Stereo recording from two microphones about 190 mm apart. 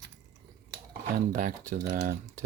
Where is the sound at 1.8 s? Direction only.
60° right (ahead or behind).